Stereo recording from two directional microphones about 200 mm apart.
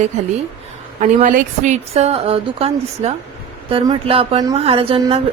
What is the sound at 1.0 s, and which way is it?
A woman's voice, 40° right (ahead or behind).